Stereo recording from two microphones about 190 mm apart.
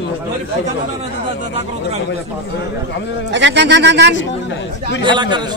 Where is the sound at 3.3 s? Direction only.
70° right (ahead or behind).